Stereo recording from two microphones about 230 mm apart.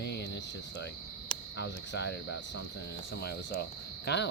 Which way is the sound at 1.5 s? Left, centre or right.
Left.